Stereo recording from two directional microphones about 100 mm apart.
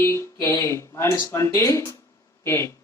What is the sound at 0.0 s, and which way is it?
Speech, 30° left (ahead or behind).